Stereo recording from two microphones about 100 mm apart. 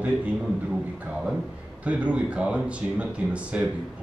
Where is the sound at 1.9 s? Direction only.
10° right (ahead or behind).